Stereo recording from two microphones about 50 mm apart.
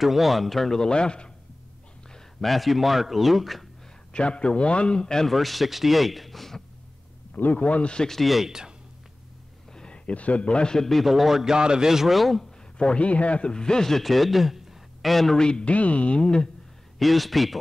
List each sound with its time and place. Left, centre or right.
0.0 s speech: centre
2.4 s a man's voice: centre
4.1 s a man's voice: left
5.3 s a man's voice: centre
7.3 s a man's voice: left
8.1 s a man's voice: centre
9.8 s a man's voice: centre
12.7 s a man's voice: left; by 15.3 s centre
15.3 s a man's voice: centre
17.0 s a man's voice: centre